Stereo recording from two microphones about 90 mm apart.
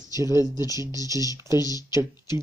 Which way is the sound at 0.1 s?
35° right (ahead or behind).